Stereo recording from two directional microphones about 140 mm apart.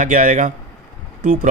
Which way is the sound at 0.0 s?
70° right (ahead or behind).